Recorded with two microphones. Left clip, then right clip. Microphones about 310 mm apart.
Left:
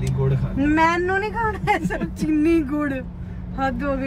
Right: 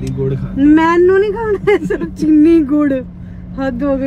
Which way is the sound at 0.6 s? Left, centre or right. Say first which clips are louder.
Right 9 dB; centre.